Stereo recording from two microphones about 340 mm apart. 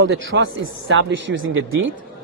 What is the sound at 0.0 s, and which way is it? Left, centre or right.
A man's voice, right.